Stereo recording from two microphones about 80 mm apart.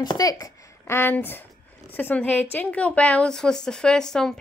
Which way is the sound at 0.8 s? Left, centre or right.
Left.